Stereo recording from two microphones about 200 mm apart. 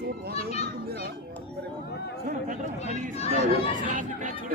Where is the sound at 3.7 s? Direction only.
40° right (ahead or behind).